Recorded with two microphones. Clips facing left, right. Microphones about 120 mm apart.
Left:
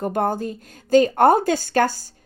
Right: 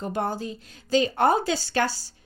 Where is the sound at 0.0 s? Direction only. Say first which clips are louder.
Left 6 dB; 55° left (ahead or behind).